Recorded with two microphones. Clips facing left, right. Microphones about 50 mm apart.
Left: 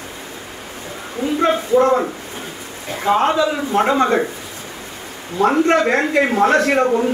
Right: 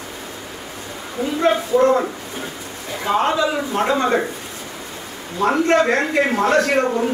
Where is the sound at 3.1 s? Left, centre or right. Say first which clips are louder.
Left 2 dB; centre.